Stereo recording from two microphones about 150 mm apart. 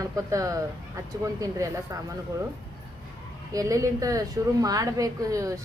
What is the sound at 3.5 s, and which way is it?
A woman's voice, 20° right (ahead or behind).